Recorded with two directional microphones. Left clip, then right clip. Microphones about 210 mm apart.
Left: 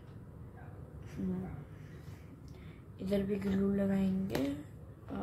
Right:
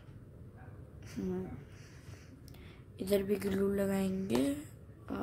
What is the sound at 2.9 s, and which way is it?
A woman's voice, 45° right (ahead or behind).